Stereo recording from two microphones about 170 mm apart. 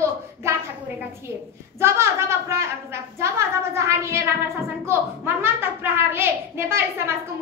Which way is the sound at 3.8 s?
15° right (ahead or behind).